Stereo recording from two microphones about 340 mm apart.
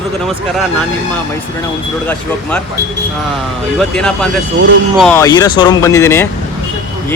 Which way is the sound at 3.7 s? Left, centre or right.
Centre.